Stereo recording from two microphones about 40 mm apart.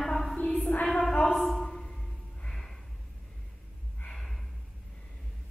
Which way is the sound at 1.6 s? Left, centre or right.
Centre.